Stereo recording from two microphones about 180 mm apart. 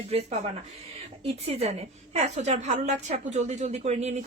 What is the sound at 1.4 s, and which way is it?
A woman's voice, 35° right (ahead or behind).